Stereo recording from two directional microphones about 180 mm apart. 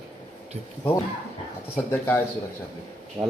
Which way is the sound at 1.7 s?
15° left (ahead or behind).